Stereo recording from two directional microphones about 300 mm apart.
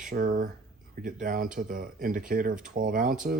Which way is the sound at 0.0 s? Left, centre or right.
Right.